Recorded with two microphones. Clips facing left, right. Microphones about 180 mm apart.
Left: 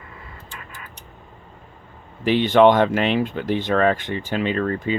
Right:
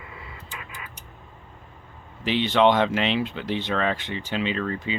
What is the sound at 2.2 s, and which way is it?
Speech, 50° left (ahead or behind).